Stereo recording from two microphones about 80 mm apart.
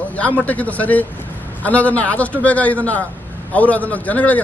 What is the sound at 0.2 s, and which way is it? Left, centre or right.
A man's voice, centre.